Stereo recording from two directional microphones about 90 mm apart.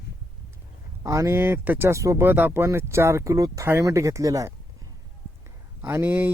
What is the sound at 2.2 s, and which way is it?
Speech, 20° right (ahead or behind).